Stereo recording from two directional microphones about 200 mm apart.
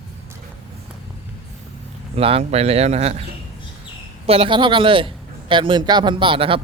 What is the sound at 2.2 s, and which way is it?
A man's voice, 30° right (ahead or behind).